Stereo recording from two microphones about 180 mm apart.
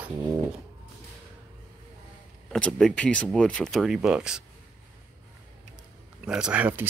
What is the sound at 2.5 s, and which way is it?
Speech, 5° left (ahead or behind).